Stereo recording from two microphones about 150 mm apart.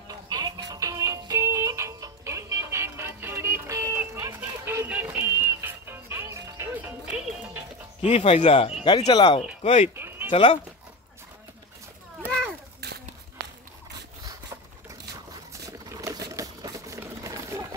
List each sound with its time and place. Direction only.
0.1 s music: 25° right (ahead or behind); by 7.6 s 10° right (ahead or behind)
8.0 s speech: 40° left (ahead or behind)
9.6 s speech: 40° left (ahead or behind)
9.9 s a sound: 15° right (ahead or behind)
10.3 s speech: 35° left (ahead or behind)
14.2 s a sound: 20° right (ahead or behind)